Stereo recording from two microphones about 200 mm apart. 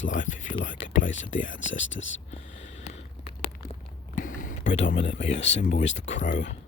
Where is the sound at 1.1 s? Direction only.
70° left (ahead or behind).